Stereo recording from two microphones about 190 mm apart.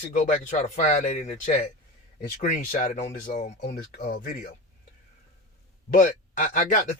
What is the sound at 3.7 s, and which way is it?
Speech, 50° left (ahead or behind).